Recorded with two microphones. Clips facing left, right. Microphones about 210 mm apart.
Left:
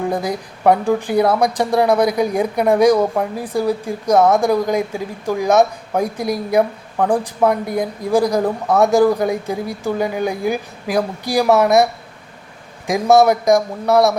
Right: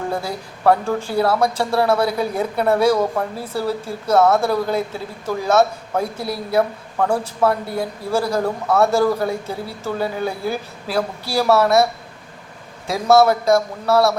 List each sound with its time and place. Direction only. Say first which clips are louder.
0.1 s speech: left 4 dB; 15° left (ahead or behind)
12.9 s speech: left 2 dB; 15° left (ahead or behind)